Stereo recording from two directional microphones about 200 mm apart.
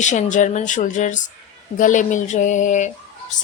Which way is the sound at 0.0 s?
35° left (ahead or behind).